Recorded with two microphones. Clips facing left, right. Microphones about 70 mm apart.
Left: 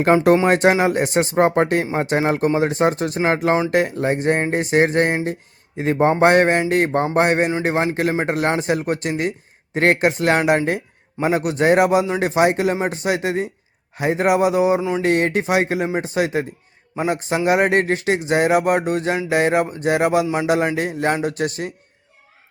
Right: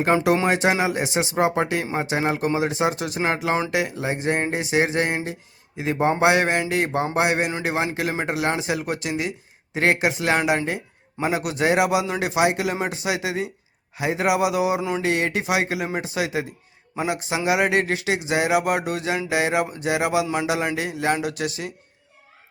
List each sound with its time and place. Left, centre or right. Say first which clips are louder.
0.5 s a man's voice: left 5 dB; left
14.8 s a sound: left 4 dB; centre
15.0 s a man's voice: left 5 dB; left